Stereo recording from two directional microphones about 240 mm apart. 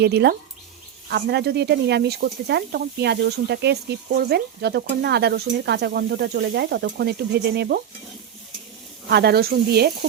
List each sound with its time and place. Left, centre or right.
0.0 s speech: right
9.0 s speech: right